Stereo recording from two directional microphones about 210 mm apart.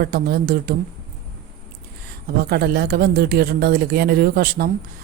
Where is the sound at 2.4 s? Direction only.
50° right (ahead or behind).